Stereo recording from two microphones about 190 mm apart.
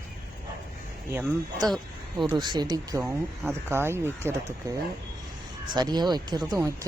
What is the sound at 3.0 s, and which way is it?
Speech, 10° right (ahead or behind).